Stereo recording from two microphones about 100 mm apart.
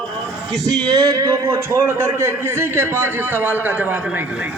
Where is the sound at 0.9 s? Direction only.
35° right (ahead or behind); by 4.2 s 15° right (ahead or behind).